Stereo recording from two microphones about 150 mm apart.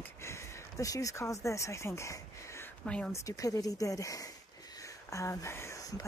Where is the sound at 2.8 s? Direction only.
10° left (ahead or behind).